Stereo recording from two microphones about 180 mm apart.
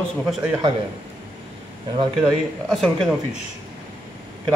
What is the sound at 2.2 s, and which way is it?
Speech, centre (ahead or behind).